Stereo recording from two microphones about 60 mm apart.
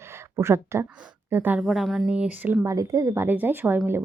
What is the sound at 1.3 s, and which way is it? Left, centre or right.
Speech, right.